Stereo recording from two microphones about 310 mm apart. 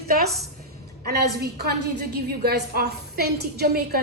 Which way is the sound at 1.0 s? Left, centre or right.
Right.